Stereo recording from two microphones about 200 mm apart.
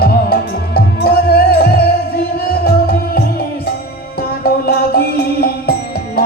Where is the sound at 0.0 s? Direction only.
50° left (ahead or behind).